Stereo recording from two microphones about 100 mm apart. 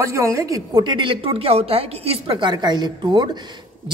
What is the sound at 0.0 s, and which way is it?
Speech, 30° right (ahead or behind).